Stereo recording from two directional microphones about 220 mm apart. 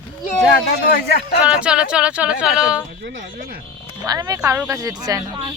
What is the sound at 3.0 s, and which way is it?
Speech, 55° right (ahead or behind).